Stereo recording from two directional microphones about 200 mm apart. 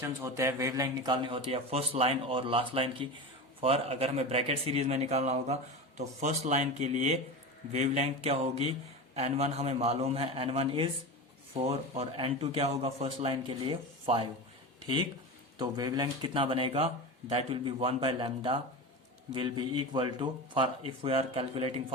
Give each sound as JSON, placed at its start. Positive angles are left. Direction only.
{"t": 0.0, "sound": "a man's voice", "side_deg": -15}
{"t": 15.5, "sound": "a man's voice", "side_deg": -20}